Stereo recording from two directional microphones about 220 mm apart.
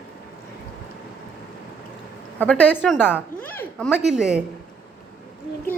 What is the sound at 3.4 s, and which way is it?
Speech, 10° left (ahead or behind).